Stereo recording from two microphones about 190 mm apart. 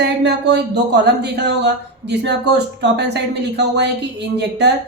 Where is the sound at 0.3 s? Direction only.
60° right (ahead or behind).